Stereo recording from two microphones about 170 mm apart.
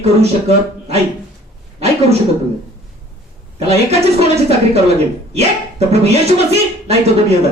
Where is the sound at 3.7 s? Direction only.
40° right (ahead or behind).